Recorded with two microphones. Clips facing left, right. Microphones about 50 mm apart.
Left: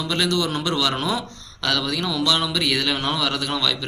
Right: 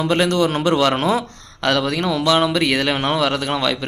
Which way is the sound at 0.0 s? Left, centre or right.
Right.